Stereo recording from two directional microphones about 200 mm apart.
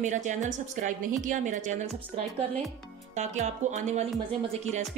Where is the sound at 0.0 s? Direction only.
40° right (ahead or behind).